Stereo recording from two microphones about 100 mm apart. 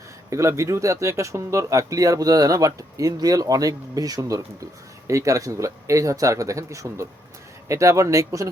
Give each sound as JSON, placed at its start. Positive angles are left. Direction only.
{"t": 0.3, "sound": "speech", "side_deg": -30}